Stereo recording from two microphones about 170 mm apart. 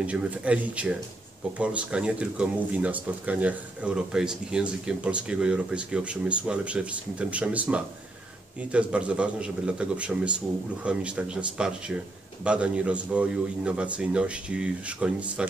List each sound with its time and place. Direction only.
0.0 s speech: 10° right (ahead or behind)